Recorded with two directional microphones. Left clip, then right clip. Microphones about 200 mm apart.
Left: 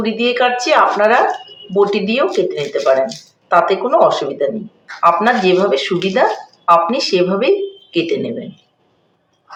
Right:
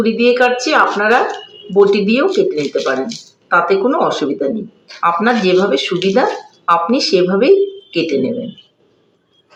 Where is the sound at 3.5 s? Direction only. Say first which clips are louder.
Even; 30° left (ahead or behind).